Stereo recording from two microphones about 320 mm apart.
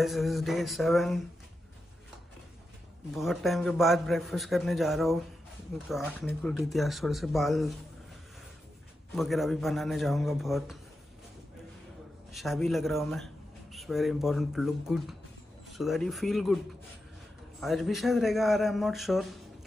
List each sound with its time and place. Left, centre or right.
0.0 s a man's voice: centre
3.1 s a man's voice: centre
9.1 s a man's voice: centre
12.3 s a man's voice: centre
17.6 s a man's voice: centre